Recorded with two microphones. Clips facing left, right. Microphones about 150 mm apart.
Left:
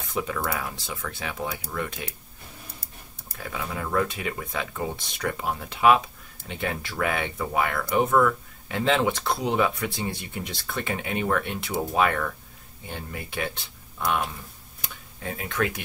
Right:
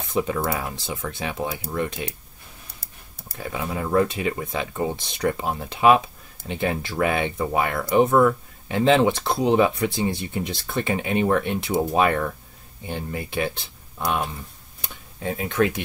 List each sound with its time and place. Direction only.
0.1 s speech: 30° right (ahead or behind)
3.3 s speech: 25° right (ahead or behind)
13.9 s speech: 25° right (ahead or behind)
15.3 s speech: 25° right (ahead or behind)